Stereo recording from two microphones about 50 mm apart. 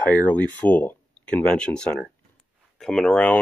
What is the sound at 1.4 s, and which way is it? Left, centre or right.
Speech, centre.